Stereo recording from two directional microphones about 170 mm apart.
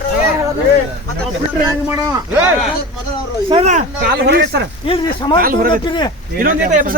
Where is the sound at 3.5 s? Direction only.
40° right (ahead or behind).